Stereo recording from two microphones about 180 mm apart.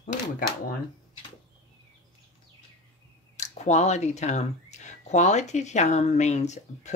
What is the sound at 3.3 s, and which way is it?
Speech, 40° left (ahead or behind).